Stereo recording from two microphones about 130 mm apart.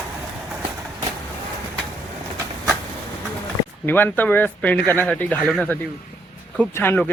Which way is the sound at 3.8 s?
15° left (ahead or behind).